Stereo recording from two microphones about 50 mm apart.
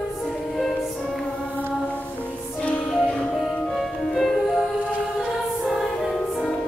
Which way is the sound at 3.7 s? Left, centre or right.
Centre.